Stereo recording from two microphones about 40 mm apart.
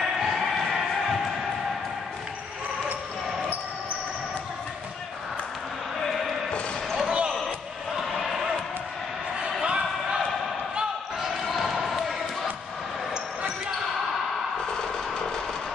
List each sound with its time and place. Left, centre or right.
0.2 s a sound: centre
7.1 s basketball bounce: right
8.1 s basketball bounce: centre
9.6 s basketball bounce: right
11.1 s basketball bounce: centre